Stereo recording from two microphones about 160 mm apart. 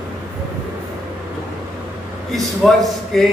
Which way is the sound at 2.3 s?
Centre (ahead or behind).